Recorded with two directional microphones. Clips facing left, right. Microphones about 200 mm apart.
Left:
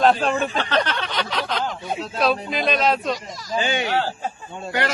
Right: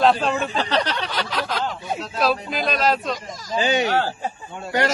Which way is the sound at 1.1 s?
5° right (ahead or behind).